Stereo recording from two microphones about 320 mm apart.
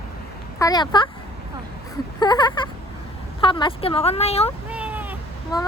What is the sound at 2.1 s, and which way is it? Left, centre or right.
A woman's voice, centre.